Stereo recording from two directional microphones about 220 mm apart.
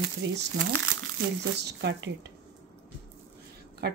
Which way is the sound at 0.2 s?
50° right (ahead or behind).